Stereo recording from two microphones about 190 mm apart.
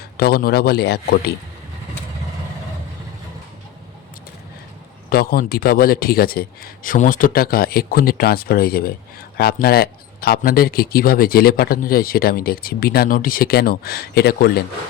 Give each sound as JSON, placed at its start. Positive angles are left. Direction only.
{"t": 0.2, "sound": "a man's voice", "side_deg": 55}
{"t": 5.0, "sound": "speech", "side_deg": 50}